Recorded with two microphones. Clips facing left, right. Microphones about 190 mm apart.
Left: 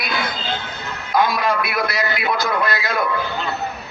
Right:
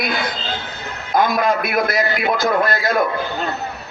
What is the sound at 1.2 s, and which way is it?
A man's voice, 45° right (ahead or behind).